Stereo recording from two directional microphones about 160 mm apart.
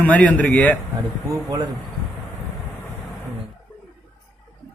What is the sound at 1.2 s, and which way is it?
Speech, 20° right (ahead or behind).